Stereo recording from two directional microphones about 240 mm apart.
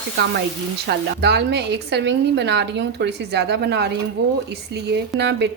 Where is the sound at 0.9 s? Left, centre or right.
Right.